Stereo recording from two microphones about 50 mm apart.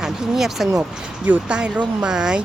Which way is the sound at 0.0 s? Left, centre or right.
Centre.